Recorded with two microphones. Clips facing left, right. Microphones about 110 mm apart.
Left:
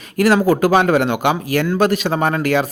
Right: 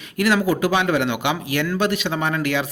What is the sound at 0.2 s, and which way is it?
Speech, 40° left (ahead or behind).